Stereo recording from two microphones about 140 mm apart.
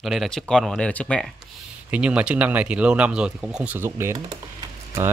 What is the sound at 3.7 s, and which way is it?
Speech, 20° right (ahead or behind).